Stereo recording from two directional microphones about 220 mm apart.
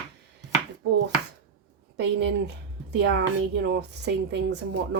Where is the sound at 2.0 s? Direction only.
50° right (ahead or behind).